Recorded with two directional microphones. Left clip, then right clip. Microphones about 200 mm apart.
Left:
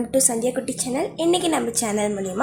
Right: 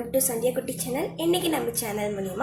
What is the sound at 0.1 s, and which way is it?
A woman's voice, 45° left (ahead or behind).